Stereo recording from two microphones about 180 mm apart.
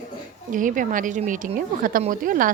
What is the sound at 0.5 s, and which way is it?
A woman's voice, 45° right (ahead or behind).